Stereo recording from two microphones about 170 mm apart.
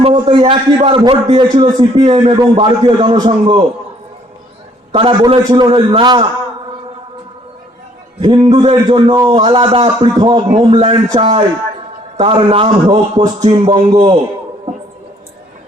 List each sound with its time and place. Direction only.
0.0 s a man's voice: 25° right (ahead or behind)
4.9 s a man's voice: 30° right (ahead or behind)
8.2 s a man's voice: 25° right (ahead or behind)